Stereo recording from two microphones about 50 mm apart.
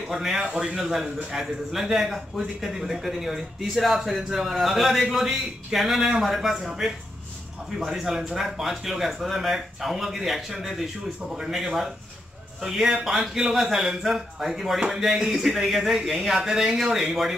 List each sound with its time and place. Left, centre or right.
0.1 s speech: centre
0.5 s a man's voice: right
0.7 s a man's voice: centre